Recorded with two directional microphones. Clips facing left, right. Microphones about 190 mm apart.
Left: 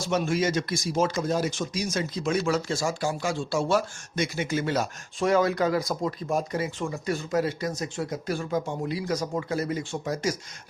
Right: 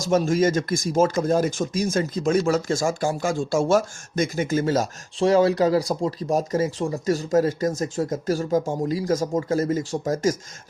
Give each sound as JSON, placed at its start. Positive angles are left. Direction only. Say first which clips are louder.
{"t": 0.0, "sound": "speech", "louder": "right 6 dB", "side_deg": -40}